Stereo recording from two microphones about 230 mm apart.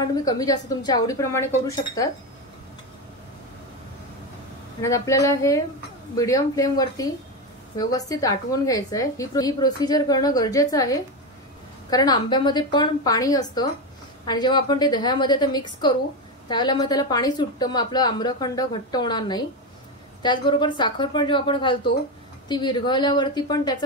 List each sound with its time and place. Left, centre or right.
0.0 s a woman's voice: centre
4.8 s a woman's voice: centre